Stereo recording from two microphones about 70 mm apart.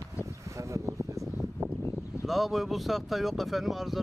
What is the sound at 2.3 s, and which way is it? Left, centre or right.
Speech, centre.